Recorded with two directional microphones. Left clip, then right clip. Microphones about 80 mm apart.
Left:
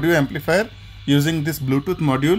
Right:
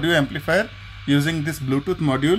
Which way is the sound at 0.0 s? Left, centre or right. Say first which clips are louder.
Left 1 dB; left.